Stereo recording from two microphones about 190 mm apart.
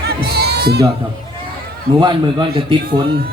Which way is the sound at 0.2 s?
60° right (ahead or behind).